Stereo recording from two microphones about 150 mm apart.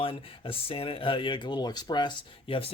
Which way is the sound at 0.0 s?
35° left (ahead or behind).